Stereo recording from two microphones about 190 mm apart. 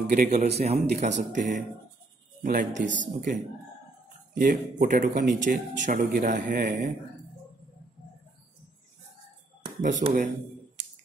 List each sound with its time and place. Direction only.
0.1 s speech: 40° right (ahead or behind)
0.7 s a man's voice: 55° right (ahead or behind)
1.0 s a man's voice: 40° right (ahead or behind)
4.4 s a man's voice: 45° right (ahead or behind)
9.8 s speech: 40° right (ahead or behind)